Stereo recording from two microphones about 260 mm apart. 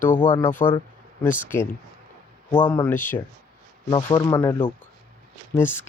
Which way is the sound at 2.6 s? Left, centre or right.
Centre.